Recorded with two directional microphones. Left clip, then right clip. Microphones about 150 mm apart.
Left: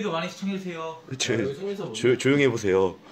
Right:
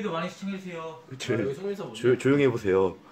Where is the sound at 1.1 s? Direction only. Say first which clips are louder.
Left 2 dB; 30° left (ahead or behind).